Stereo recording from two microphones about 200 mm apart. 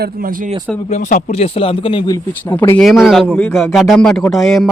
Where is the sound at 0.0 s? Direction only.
45° right (ahead or behind).